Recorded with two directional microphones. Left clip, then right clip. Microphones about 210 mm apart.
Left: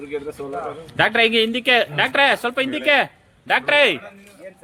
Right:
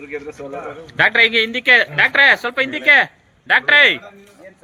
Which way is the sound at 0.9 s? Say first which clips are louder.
Right 4 dB; 40° left (ahead or behind).